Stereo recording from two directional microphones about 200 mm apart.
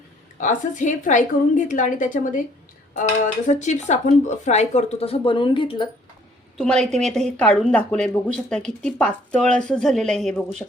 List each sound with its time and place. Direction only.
0.3 s speech: 40° left (ahead or behind)
6.6 s speech: 5° left (ahead or behind)